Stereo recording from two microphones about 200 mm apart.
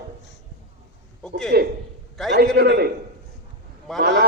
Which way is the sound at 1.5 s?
50° right (ahead or behind).